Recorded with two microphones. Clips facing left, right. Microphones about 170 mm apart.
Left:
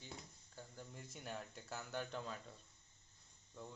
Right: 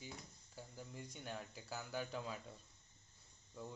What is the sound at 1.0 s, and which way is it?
Speech, centre (ahead or behind).